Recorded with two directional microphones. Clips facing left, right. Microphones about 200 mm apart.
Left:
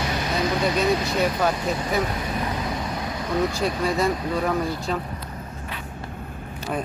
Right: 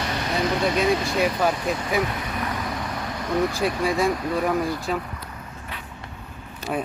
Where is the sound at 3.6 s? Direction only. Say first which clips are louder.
Right 1 dB; centre (ahead or behind).